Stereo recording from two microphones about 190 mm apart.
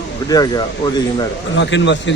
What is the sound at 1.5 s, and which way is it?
Speech, 70° left (ahead or behind).